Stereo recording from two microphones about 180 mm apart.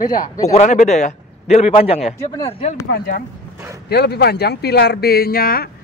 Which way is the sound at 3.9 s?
65° left (ahead or behind).